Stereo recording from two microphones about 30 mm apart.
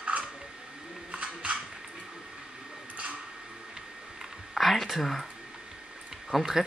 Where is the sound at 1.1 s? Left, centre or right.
Right.